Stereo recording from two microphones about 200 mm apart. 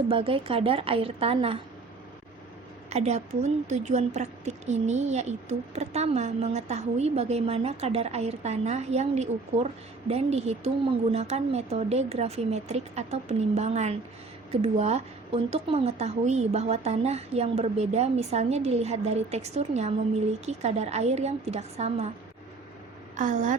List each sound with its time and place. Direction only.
0.1 s a woman's voice: 25° right (ahead or behind)
2.9 s speech: 35° right (ahead or behind)
23.1 s speech: 40° right (ahead or behind)